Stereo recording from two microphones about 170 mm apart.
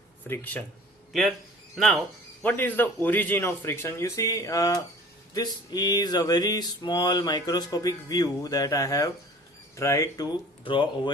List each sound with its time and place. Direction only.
0.3 s a man's voice: 10° left (ahead or behind)
1.7 s a man's voice: centre (ahead or behind); by 4.8 s 20° left (ahead or behind)
5.3 s a sound: 25° left (ahead or behind)